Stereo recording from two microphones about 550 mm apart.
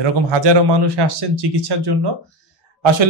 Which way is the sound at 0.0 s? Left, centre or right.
Right.